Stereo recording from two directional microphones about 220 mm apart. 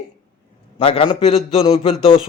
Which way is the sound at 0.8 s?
25° left (ahead or behind).